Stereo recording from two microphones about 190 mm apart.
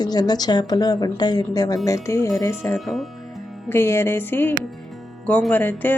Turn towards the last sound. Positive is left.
turn(degrees=10)  # may be behind; listen again after turning